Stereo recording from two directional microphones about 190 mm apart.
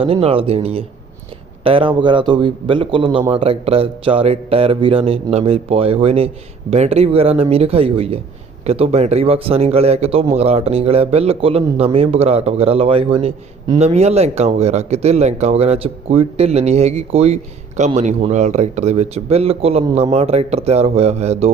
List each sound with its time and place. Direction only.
0.0 s speech: 30° right (ahead or behind)